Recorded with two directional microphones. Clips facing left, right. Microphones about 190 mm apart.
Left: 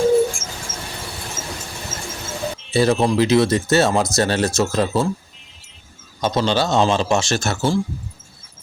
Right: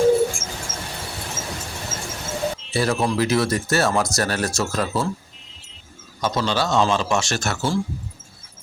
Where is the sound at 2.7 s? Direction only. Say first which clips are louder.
Left 6 dB; 25° left (ahead or behind).